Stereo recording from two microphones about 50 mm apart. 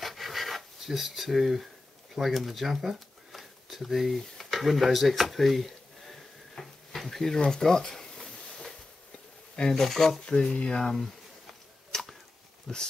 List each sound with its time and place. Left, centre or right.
0.0 s filing: centre
2.1 s speech: centre
4.2 s a sound: centre
9.6 s speech: centre
10.2 s speech: centre
11.9 s arrow: centre
12.7 s speech: centre